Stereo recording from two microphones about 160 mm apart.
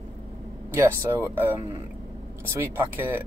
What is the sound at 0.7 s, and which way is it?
Speech, 15° right (ahead or behind).